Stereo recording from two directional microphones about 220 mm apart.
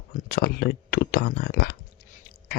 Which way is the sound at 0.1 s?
45° left (ahead or behind).